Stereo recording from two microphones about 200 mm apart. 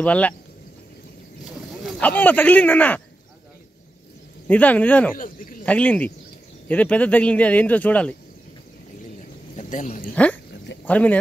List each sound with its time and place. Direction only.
0.0 s speech: 5° left (ahead or behind)
1.8 s speech: 5° left (ahead or behind)
4.5 s speech: 10° left (ahead or behind)
5.1 s speech: 45° left (ahead or behind)
5.7 s speech: 5° left (ahead or behind)
9.6 s speech: 35° left (ahead or behind)
10.1 s speech: 5° left (ahead or behind)